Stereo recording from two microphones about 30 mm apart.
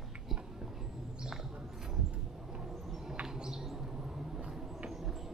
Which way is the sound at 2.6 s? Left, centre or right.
Centre.